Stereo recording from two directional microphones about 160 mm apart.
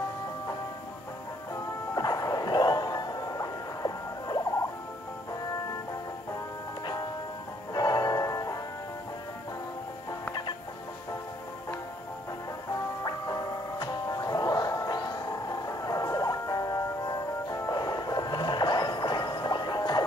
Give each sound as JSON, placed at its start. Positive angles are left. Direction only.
{"t": 2.0, "sound": "music", "side_deg": 25}
{"t": 7.7, "sound": "music", "side_deg": 25}
{"t": 13.0, "sound": "music", "side_deg": 25}